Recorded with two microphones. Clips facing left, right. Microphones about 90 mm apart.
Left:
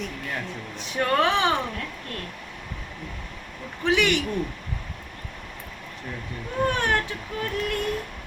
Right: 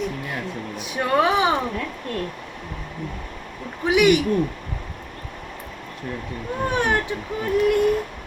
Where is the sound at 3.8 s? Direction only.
15° right (ahead or behind).